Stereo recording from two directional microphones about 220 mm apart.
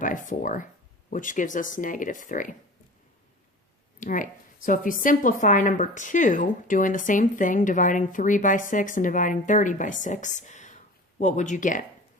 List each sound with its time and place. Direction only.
0.0 s speech: 35° left (ahead or behind)
4.0 s speech: 35° left (ahead or behind)